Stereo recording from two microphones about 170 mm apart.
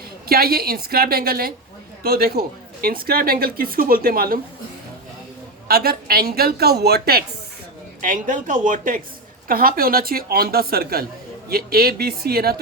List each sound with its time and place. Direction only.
0.3 s a woman's voice: 65° right (ahead or behind)
5.6 s a woman's voice: 65° right (ahead or behind)
8.0 s a woman's voice: 50° right (ahead or behind); by 12.5 s 65° right (ahead or behind)